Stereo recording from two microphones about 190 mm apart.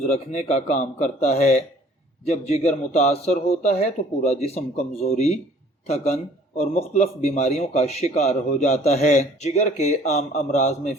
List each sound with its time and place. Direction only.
0.1 s a man's voice: 35° left (ahead or behind)
6.6 s a man's voice: 35° left (ahead or behind)